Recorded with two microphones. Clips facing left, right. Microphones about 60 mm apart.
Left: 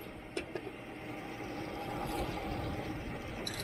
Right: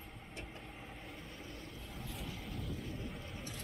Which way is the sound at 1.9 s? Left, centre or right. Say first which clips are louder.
Left 9 dB; left.